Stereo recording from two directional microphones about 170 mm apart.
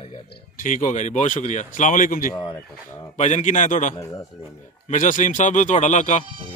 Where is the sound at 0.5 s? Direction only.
50° left (ahead or behind).